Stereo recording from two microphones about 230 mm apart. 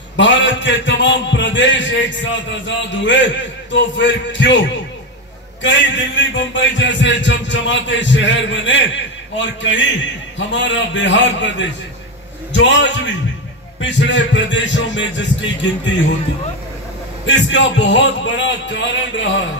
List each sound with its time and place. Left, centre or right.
0.1 s a man's voice: left
17.3 s a man's voice: left